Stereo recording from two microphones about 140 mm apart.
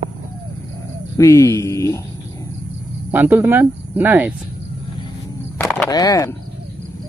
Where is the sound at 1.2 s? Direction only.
20° left (ahead or behind).